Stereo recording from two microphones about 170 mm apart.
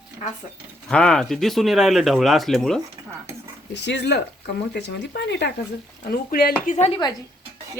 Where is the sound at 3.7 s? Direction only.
90° left.